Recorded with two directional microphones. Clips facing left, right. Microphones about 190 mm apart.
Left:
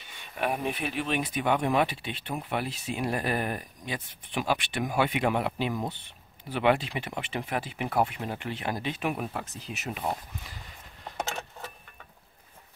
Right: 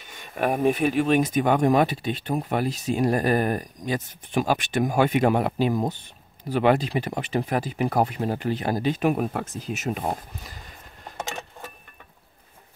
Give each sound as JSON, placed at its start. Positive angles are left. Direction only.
{"t": 0.0, "sound": "speech", "side_deg": -45}